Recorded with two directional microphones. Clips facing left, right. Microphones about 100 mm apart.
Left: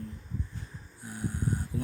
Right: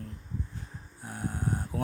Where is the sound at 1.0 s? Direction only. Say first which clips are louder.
Even; 50° right (ahead or behind).